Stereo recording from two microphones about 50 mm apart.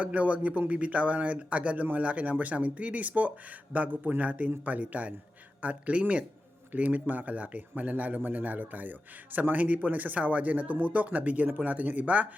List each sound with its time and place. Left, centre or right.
0.0 s speech: right